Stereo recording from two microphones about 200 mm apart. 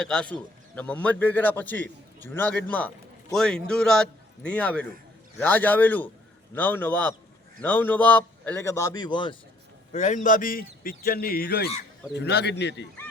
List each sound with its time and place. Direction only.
0.0 s a man's voice: 5° left (ahead or behind); by 9.4 s 25° left (ahead or behind)
9.9 s speech: 40° left (ahead or behind); by 12.9 s 60° left (ahead or behind)